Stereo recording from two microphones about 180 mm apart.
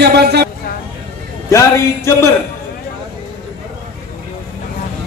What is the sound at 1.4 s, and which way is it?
Speech, 15° left (ahead or behind).